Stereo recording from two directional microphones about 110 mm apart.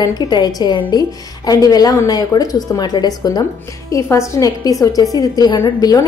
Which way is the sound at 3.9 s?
30° left (ahead or behind).